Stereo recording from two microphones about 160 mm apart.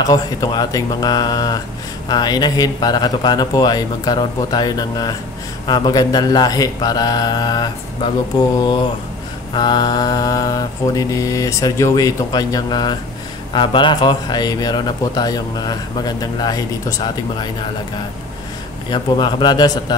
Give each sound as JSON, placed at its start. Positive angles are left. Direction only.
{"t": 0.0, "sound": "a man's voice", "side_deg": 25}
{"t": 18.9, "sound": "a man's voice", "side_deg": 30}